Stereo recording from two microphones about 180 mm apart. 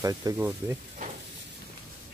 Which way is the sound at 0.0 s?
20° right (ahead or behind).